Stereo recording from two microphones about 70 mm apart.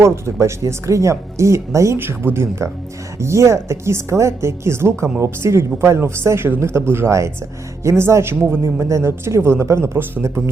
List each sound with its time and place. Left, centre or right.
0.0 s speech: right
2.0 s speech: right